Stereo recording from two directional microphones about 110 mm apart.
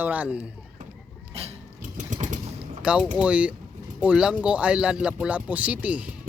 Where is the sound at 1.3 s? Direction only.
65° right (ahead or behind).